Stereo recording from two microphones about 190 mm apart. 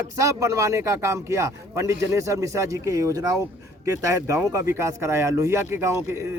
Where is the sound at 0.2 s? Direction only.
15° right (ahead or behind).